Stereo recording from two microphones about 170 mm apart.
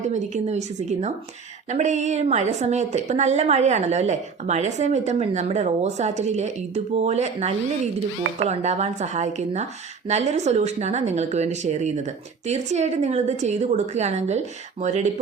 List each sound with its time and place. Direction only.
0.0 s a woman's voice: 45° right (ahead or behind)